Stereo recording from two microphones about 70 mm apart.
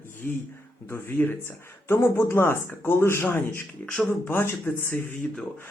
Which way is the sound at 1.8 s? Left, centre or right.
Left.